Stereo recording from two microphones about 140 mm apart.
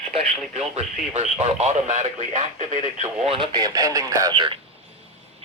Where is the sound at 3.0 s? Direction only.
40° right (ahead or behind).